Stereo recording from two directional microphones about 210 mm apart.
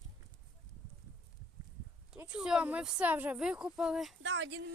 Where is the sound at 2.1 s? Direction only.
5° right (ahead or behind).